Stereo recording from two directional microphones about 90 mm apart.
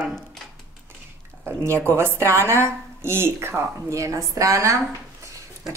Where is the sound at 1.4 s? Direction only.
25° right (ahead or behind).